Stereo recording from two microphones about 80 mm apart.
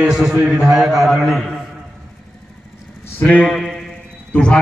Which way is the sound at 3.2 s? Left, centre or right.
Centre.